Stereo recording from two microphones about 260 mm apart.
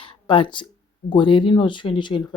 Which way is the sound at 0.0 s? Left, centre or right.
Centre.